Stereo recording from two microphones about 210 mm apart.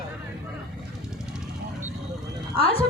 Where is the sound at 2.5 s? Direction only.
25° left (ahead or behind).